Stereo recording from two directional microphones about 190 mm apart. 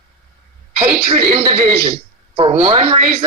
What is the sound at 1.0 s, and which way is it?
Speech, 30° right (ahead or behind).